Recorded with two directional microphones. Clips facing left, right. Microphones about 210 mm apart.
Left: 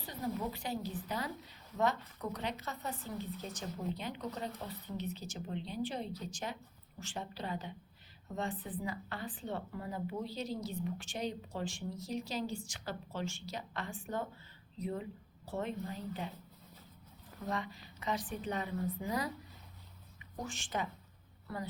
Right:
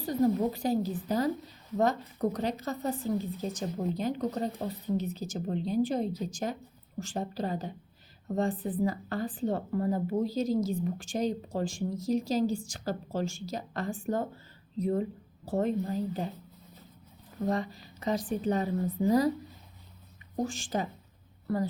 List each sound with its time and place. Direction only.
0.0 s a woman's voice: 45° right (ahead or behind)
17.4 s a woman's voice: 40° right (ahead or behind)
20.3 s a woman's voice: 40° right (ahead or behind)